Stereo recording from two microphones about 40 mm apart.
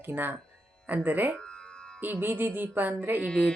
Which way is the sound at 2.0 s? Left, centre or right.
Right.